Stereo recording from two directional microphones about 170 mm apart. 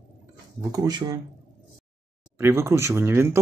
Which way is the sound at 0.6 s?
20° right (ahead or behind).